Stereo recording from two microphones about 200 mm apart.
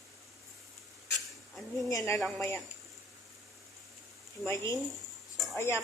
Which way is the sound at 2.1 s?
Centre (ahead or behind).